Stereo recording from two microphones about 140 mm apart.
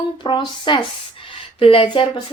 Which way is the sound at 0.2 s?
35° left (ahead or behind).